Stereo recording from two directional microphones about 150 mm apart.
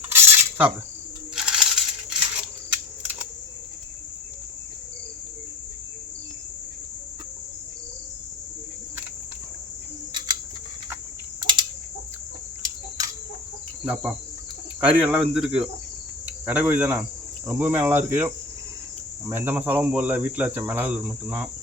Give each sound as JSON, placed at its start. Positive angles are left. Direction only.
{"t": 0.1, "sound": "cutlery", "side_deg": -15}
{"t": 1.4, "sound": "coin", "side_deg": -5}
{"t": 2.6, "sound": "camera", "side_deg": -10}
{"t": 11.3, "sound": "a sound", "side_deg": -30}
{"t": 13.8, "sound": "insect", "side_deg": -5}
{"t": 14.8, "sound": "speech", "side_deg": -10}
{"t": 15.4, "sound": "insect", "side_deg": -5}
{"t": 16.2, "sound": "cricket", "side_deg": -10}
{"t": 17.4, "sound": "speech", "side_deg": -10}